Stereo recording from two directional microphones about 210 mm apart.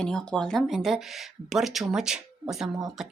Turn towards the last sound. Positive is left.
turn(degrees=0)  # may be behind; listen again after turning